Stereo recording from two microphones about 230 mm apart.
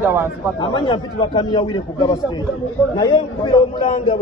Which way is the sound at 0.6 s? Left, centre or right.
Left.